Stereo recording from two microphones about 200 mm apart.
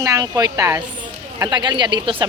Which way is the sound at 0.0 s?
20° right (ahead or behind).